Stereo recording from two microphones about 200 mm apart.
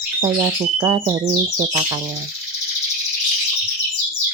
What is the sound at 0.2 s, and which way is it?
Cricket, 20° right (ahead or behind).